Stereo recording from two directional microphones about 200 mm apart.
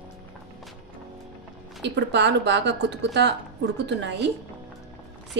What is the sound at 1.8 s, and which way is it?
Speech, 60° right (ahead or behind).